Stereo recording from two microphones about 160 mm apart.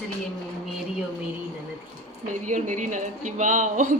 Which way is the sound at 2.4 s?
50° right (ahead or behind).